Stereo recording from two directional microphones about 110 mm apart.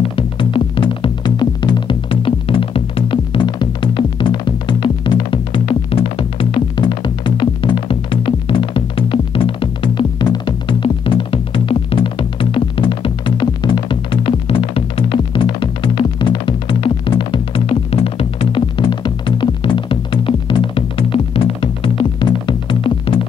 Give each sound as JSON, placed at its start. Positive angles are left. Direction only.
{"t": 0.1, "sound": "music", "side_deg": 50}